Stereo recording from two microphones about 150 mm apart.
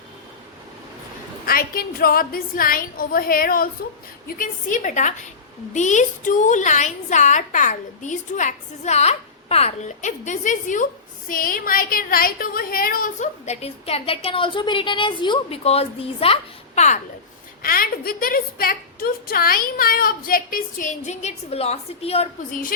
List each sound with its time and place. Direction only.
1.5 s a woman's voice: 80° left
4.4 s a woman's voice: 60° left (ahead or behind)
11.3 s a woman's voice: 70° left (ahead or behind)
13.4 s a woman's voice: 45° left (ahead or behind)
17.6 s a woman's voice: 75° left (ahead or behind); by 22.3 s 45° left (ahead or behind)